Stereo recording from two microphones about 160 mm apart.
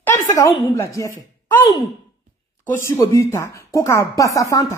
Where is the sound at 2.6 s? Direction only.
15° left (ahead or behind).